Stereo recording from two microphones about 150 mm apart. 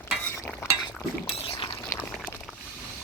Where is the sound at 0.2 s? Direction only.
15° left (ahead or behind).